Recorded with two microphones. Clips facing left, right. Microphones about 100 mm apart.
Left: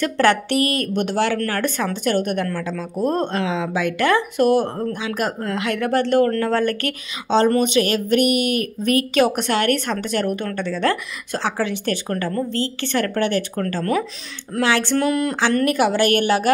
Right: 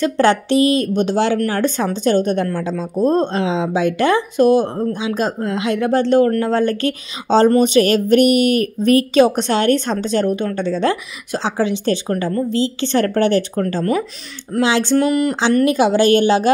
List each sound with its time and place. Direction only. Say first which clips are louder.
0.0 s a woman's voice: right 3 dB; 20° right (ahead or behind)
7.2 s a woman's voice: right 4 dB; 35° right (ahead or behind)
12.3 s a woman's voice: right 6 dB; 10° right (ahead or behind)
12.9 s speech: right 5 dB; 35° right (ahead or behind)
13.6 s a woman's voice: right 3 dB; 20° right (ahead or behind)
15.0 s a woman's voice: right 4 dB; 5° right (ahead or behind)
15.5 s a woman's voice: right 5 dB; 20° right (ahead or behind)